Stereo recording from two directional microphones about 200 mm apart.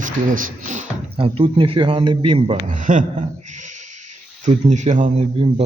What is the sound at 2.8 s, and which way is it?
Speech, 40° right (ahead or behind).